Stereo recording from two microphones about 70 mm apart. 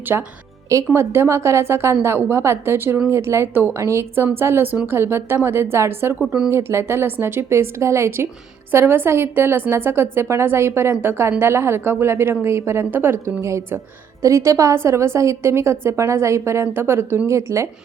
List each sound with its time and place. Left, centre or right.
0.1 s a woman's voice: right
6.1 s speech: centre
6.5 s a woman's voice: right
13.4 s a woman's voice: right